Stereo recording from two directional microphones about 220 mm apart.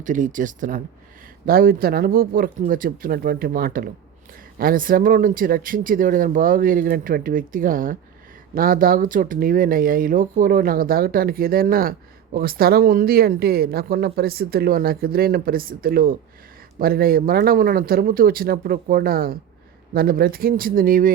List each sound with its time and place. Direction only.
0.0 s speech: 35° right (ahead or behind)